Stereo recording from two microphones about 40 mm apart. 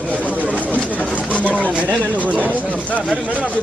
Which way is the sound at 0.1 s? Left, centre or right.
Left.